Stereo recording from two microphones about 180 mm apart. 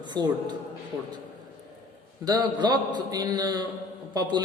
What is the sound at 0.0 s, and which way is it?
Speech, 25° right (ahead or behind).